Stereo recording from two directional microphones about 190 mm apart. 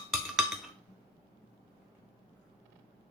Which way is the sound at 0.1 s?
Centre (ahead or behind).